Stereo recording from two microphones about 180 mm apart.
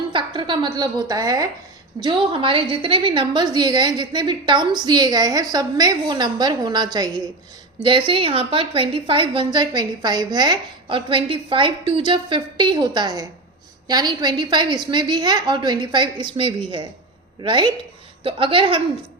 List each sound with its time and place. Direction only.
0.1 s a woman's voice: 25° right (ahead or behind)